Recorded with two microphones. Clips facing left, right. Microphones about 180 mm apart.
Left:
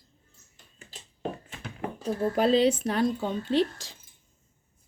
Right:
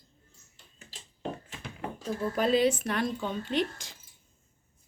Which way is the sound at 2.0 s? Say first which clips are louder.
Left 4 dB; 40° left (ahead or behind).